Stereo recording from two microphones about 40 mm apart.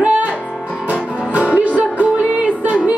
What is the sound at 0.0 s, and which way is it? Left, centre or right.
Music, right.